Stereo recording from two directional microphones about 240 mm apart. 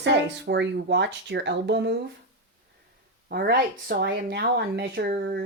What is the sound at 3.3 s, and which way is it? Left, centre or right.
Speech, right.